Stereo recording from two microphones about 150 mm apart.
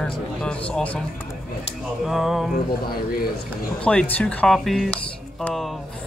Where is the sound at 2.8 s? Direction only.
90° left.